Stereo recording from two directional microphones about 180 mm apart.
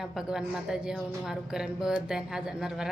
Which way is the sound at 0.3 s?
5° right (ahead or behind).